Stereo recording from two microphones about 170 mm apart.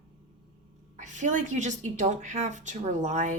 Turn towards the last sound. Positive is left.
turn(degrees=-45)  # may be behind; listen again after turning